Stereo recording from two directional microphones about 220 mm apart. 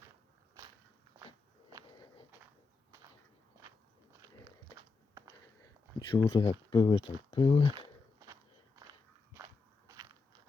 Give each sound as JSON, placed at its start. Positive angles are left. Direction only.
{"t": 4.7, "sound": "a sound", "side_deg": -15}
{"t": 6.0, "sound": "speech", "side_deg": 25}
{"t": 8.8, "sound": "walk", "side_deg": -15}